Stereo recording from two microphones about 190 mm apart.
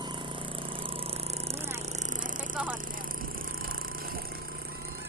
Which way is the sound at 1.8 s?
35° right (ahead or behind).